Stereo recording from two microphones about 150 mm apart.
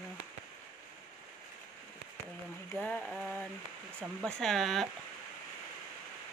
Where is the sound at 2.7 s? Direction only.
10° left (ahead or behind).